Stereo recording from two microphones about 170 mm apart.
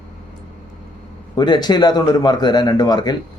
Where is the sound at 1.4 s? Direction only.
25° left (ahead or behind).